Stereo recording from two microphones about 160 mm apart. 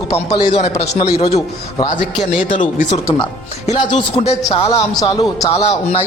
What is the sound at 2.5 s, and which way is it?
Speech, 30° left (ahead or behind).